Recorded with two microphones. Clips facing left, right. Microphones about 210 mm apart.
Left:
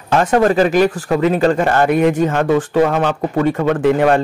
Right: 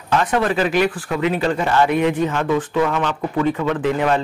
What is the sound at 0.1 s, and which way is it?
Speech, 45° left (ahead or behind).